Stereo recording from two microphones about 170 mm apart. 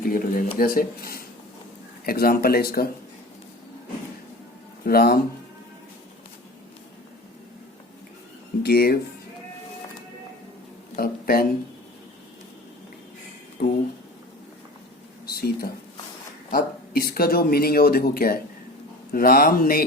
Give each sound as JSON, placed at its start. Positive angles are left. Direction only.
{"t": 0.0, "sound": "speech", "side_deg": 60}
{"t": 4.9, "sound": "speech", "side_deg": 65}
{"t": 8.6, "sound": "speech", "side_deg": 65}
{"t": 10.9, "sound": "speech", "side_deg": 65}
{"t": 13.6, "sound": "speech", "side_deg": 60}
{"t": 15.3, "sound": "speech", "side_deg": 65}